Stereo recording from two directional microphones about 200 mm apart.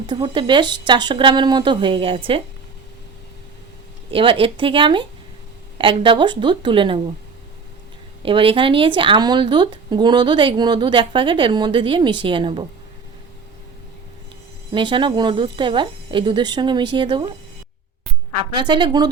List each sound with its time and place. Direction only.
0.1 s speech: 25° right (ahead or behind)
4.1 s speech: 25° right (ahead or behind)
8.2 s speech: 25° right (ahead or behind)
14.7 s speech: 25° right (ahead or behind)
18.5 s speech: 25° right (ahead or behind)